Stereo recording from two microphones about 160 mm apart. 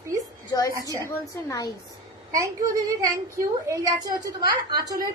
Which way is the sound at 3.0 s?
20° right (ahead or behind).